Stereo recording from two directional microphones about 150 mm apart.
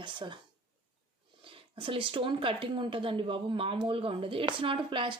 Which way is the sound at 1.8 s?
35° right (ahead or behind).